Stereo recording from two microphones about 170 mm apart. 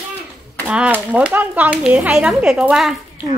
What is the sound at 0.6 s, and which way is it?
A woman's voice, 10° right (ahead or behind).